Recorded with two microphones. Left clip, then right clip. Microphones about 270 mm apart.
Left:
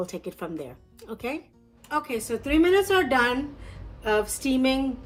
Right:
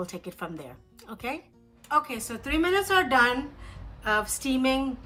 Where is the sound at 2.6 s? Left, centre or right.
Centre.